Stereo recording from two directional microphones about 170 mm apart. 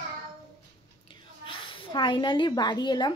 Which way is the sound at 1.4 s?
30° left (ahead or behind).